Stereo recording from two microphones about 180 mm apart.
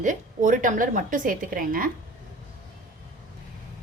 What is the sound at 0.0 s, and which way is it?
A woman's voice, 45° right (ahead or behind).